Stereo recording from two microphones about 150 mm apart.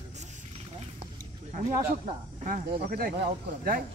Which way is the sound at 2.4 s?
70° right (ahead or behind).